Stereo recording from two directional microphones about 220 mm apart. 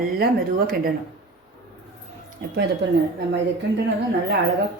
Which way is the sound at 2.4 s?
40° right (ahead or behind).